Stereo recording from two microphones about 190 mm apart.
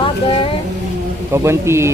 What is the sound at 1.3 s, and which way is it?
Speech, 15° right (ahead or behind).